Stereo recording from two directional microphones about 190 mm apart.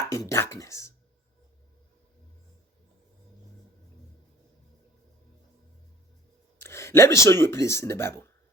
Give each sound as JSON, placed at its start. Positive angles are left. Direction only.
{"t": 0.1, "sound": "speech", "side_deg": 15}
{"t": 6.6, "sound": "speech", "side_deg": 15}